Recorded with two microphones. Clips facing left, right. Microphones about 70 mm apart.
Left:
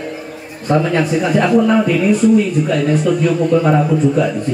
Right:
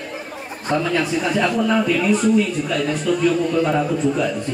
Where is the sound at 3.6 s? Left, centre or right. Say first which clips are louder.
Left 5 dB; centre.